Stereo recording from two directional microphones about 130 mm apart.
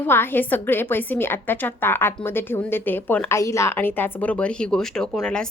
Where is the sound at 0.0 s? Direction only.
15° left (ahead or behind).